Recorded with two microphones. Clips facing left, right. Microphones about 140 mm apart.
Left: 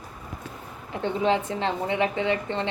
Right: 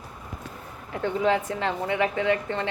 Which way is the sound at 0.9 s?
25° left (ahead or behind).